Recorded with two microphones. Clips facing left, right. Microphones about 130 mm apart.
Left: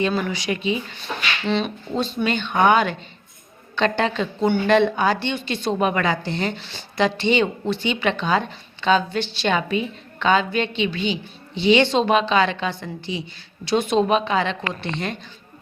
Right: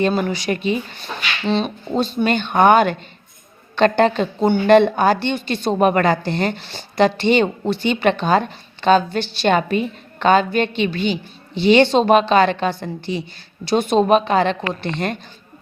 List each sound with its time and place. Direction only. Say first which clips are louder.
0.3 s a woman's voice: right 3 dB; 45° right (ahead or behind)
1.5 s speech: right 4 dB; 35° right (ahead or behind)
2.2 s a woman's voice: right 4 dB; 50° right (ahead or behind)